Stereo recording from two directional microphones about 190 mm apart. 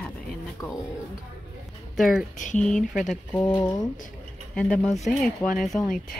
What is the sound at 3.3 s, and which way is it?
Speech, 10° left (ahead or behind).